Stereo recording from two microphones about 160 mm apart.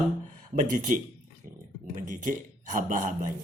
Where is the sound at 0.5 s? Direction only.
50° right (ahead or behind).